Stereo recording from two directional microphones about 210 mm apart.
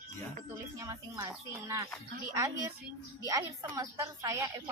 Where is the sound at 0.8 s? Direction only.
15° right (ahead or behind).